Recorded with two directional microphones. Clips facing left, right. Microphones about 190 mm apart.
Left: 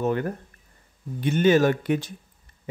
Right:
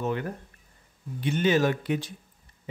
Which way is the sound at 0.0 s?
45° left (ahead or behind).